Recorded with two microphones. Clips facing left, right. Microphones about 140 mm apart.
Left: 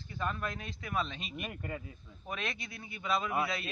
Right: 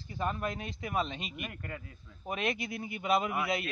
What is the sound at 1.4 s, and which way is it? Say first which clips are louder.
Speech: left 2 dB; 5° left (ahead or behind).